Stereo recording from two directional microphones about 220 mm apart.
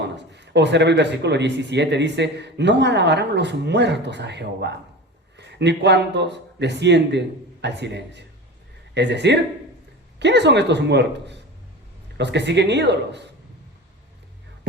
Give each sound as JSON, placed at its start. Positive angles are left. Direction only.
{"t": 0.2, "sound": "speech", "side_deg": -50}